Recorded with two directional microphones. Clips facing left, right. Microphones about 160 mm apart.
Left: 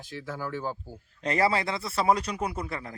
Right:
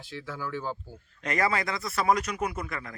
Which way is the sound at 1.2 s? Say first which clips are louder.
Left 2 dB; 30° left (ahead or behind).